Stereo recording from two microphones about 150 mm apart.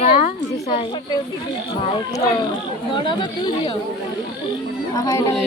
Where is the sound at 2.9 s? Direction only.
35° left (ahead or behind).